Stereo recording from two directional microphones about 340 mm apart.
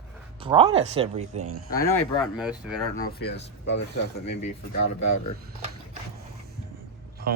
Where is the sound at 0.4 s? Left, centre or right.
Centre.